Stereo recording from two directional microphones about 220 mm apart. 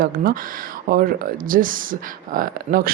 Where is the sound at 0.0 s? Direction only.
40° right (ahead or behind).